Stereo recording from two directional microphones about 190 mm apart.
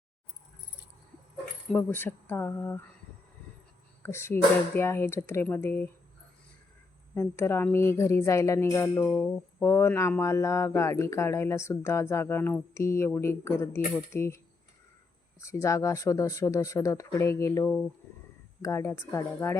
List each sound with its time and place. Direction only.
1.7 s speech: 10° left (ahead or behind)
4.0 s speech: 15° left (ahead or behind)
7.1 s speech: 15° left (ahead or behind)